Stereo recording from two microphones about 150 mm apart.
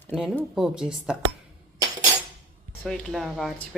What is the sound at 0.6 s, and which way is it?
Speech, 5° right (ahead or behind).